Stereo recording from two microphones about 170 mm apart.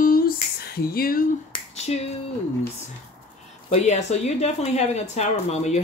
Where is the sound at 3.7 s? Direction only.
40° left (ahead or behind).